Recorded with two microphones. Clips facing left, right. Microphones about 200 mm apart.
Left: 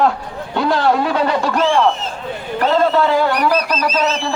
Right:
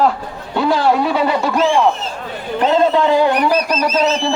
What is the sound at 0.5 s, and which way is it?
A man's voice, 5° right (ahead or behind).